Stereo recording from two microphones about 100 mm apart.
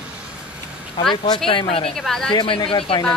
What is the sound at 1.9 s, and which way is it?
Speech, 5° left (ahead or behind).